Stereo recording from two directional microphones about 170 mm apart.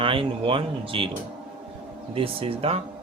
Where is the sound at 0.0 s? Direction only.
30° right (ahead or behind).